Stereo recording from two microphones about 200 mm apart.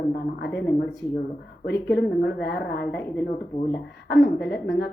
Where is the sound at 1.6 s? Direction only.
55° left (ahead or behind).